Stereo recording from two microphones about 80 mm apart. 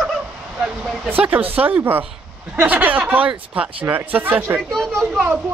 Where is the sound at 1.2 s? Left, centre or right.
Right.